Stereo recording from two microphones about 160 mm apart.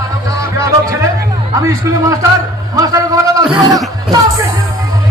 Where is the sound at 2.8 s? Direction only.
20° right (ahead or behind).